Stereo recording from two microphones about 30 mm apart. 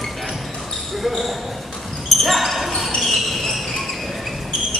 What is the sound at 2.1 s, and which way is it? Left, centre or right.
Basketball bounce, centre.